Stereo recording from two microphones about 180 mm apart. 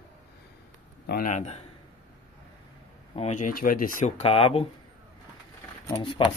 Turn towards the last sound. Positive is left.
turn(degrees=30)  # may be behind; listen again after turning